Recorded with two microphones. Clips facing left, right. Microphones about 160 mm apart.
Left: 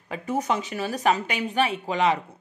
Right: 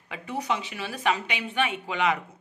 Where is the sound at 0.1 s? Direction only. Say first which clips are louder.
Left 4 dB; 45° left (ahead or behind).